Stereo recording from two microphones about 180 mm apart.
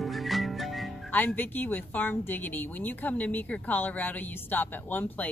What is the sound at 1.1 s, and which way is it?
A woman's voice, 10° left (ahead or behind).